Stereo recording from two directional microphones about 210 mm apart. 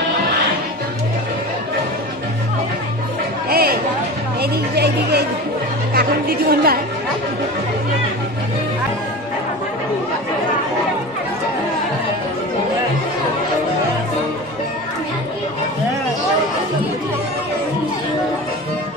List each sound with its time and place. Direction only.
3.4 s chatter: 45° right (ahead or behind)
4.4 s a woman's voice: 50° right (ahead or behind)